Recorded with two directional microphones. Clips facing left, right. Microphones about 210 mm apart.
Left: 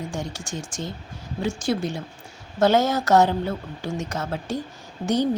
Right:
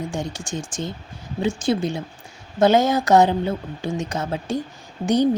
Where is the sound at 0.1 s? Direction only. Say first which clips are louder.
Right 3 dB; 15° right (ahead or behind).